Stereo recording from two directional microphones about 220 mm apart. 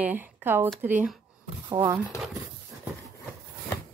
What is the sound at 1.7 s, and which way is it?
Speech, 20° right (ahead or behind).